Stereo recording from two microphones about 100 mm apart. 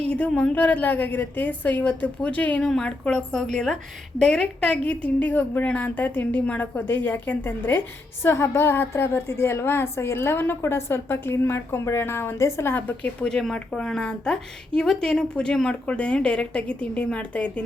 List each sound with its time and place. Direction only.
0.1 s a woman's voice: 10° left (ahead or behind)
13.2 s a woman's voice: 5° left (ahead or behind)